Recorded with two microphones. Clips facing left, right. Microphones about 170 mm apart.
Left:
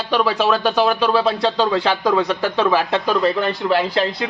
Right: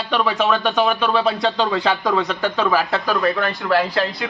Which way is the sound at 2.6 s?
20° left (ahead or behind).